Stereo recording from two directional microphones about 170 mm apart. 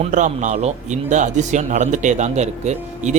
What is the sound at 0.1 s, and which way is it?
Speech, 45° right (ahead or behind).